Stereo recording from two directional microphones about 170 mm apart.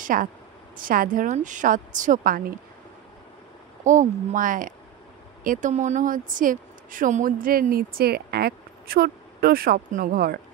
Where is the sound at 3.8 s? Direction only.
50° right (ahead or behind).